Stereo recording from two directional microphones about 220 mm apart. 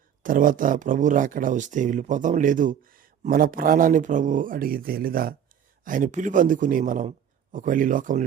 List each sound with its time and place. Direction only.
0.2 s speech: 35° right (ahead or behind)